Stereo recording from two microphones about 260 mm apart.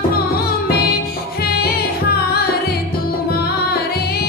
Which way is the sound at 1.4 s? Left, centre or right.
Left.